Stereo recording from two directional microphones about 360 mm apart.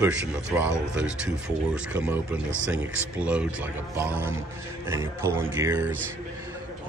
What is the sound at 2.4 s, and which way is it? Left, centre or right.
Speech, right.